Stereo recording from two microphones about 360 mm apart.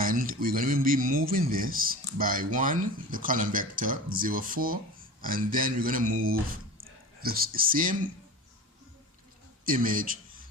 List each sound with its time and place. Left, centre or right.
0.0 s speech: right
9.6 s a man's voice: right